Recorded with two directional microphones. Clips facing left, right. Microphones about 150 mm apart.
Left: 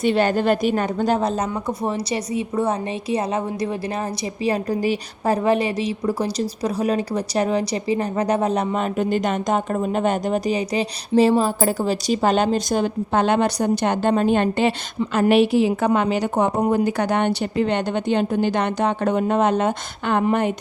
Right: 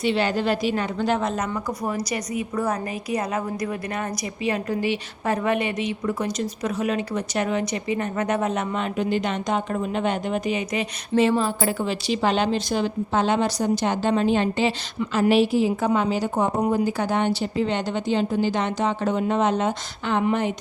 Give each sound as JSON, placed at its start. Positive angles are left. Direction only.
{"t": 0.0, "sound": "a woman's voice", "side_deg": 50}